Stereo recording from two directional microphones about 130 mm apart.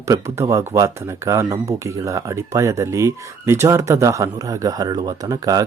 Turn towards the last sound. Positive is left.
turn(degrees=-30)  # may be behind; listen again after turning